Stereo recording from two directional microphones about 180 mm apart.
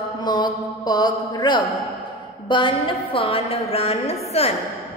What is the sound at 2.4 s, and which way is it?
A woman's voice, 25° left (ahead or behind).